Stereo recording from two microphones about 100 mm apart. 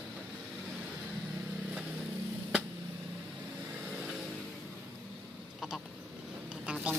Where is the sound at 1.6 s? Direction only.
5° right (ahead or behind).